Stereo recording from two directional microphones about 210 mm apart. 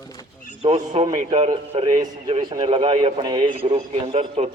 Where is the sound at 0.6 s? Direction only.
30° right (ahead or behind).